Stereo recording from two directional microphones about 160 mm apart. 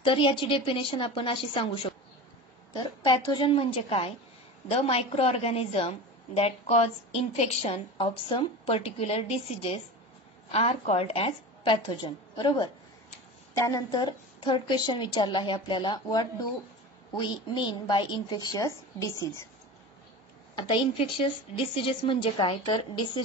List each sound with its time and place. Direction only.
0.0 s a woman's voice: 30° left (ahead or behind)
20.5 s a woman's voice: 30° left (ahead or behind)